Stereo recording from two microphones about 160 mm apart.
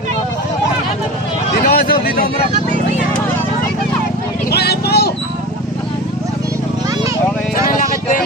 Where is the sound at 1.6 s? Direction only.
70° left (ahead or behind).